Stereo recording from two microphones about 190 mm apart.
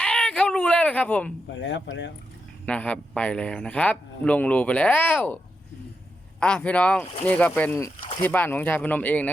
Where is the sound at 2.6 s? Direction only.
5° left (ahead or behind).